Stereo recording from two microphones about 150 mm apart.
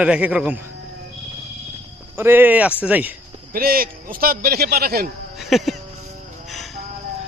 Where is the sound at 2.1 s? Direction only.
15° right (ahead or behind).